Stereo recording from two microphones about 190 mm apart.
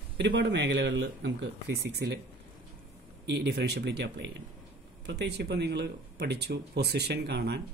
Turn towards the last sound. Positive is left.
turn(degrees=-60)  # may be behind; listen again after turning